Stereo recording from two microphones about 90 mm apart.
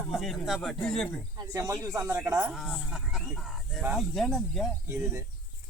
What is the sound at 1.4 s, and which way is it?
Speech, 40° right (ahead or behind).